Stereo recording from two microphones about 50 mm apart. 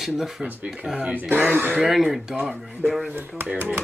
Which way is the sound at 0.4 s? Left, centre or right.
Right.